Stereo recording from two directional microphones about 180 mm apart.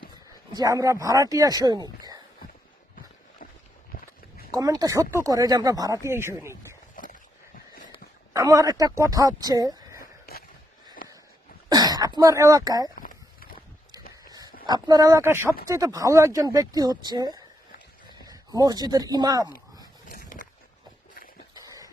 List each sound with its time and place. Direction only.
0.1 s speech: 20° right (ahead or behind)
4.5 s speech: 20° right (ahead or behind)
8.3 s speech: 20° right (ahead or behind)
10.3 s a sound: 55° left (ahead or behind)
11.7 s speech: 20° right (ahead or behind)
13.0 s walk: 50° left (ahead or behind)
14.3 s a sound: 20° right (ahead or behind)
14.7 s speech: 20° right (ahead or behind)
20.1 s skateboard: 50° left (ahead or behind)
21.5 s a sound: 20° right (ahead or behind)